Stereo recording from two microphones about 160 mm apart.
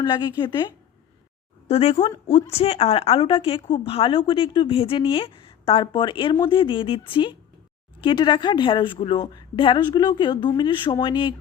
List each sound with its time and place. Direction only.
0.0 s a woman's voice: 30° left (ahead or behind)